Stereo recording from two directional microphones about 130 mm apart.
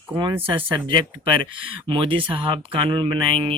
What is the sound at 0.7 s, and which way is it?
Speech, 40° right (ahead or behind).